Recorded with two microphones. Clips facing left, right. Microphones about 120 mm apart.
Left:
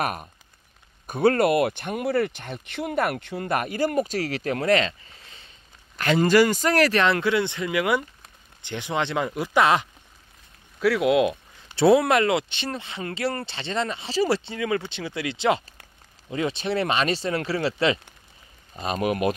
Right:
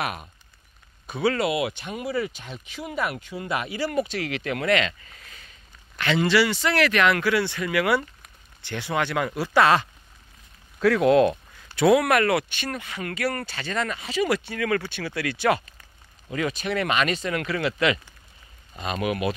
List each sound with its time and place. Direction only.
1.0 s speech: 50° left (ahead or behind); by 5.5 s 30° left (ahead or behind)
5.9 s speech: 40° left (ahead or behind); by 9.8 s 20° left (ahead or behind)
10.8 s speech: 5° left (ahead or behind)
11.7 s speech: 30° left (ahead or behind)